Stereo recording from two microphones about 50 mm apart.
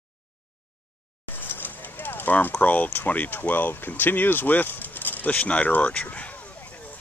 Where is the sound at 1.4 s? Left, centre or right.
Left.